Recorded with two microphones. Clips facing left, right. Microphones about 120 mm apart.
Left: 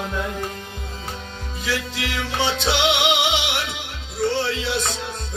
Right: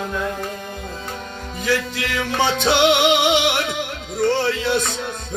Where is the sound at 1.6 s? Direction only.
50° right (ahead or behind).